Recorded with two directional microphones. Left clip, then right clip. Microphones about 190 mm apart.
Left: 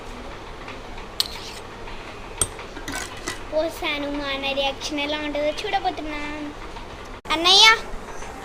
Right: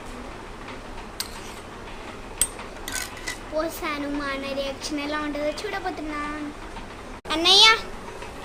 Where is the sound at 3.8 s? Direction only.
25° right (ahead or behind).